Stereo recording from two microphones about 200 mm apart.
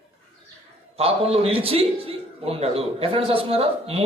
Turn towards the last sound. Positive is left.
turn(degrees=-30)  # may be behind; listen again after turning